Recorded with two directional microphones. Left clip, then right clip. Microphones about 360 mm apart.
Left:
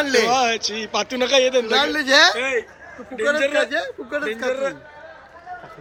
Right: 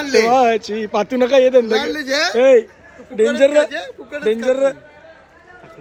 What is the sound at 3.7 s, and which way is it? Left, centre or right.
Speech, left.